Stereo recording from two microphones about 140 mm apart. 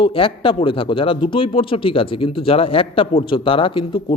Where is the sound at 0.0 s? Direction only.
40° left (ahead or behind).